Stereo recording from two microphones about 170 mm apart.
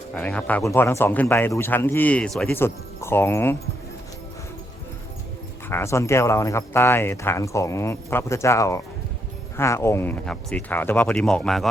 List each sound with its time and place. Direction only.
0.1 s speech: 5° left (ahead or behind)
2.5 s speech: 15° left (ahead or behind)
5.6 s speech: 15° left (ahead or behind)